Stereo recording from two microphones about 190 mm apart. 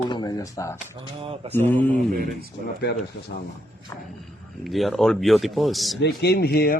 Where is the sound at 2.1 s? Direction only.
50° right (ahead or behind).